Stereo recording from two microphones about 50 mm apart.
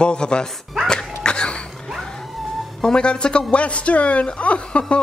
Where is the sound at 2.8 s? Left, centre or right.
Centre.